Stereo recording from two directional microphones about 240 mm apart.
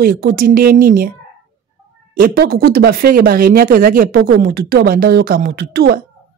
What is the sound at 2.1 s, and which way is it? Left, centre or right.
Speech, right.